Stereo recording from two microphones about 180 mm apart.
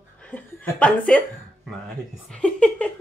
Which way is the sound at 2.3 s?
5° left (ahead or behind).